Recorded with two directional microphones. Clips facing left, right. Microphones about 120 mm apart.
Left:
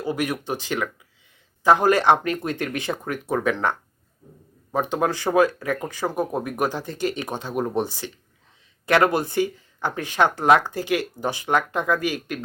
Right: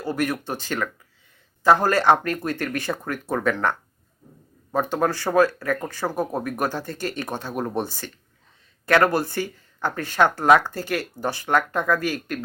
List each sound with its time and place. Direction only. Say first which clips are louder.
0.0 s speech: even; 15° left (ahead or behind)